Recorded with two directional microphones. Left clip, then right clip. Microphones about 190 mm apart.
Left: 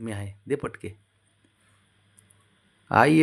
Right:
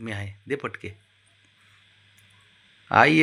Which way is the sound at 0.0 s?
20° left (ahead or behind).